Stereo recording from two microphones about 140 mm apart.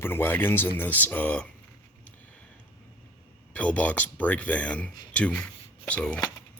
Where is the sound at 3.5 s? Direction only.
10° left (ahead or behind).